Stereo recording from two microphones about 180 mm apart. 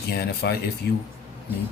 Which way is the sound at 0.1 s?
65° left (ahead or behind).